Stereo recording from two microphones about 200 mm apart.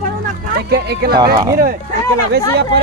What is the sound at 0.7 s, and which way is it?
Speech, 55° right (ahead or behind).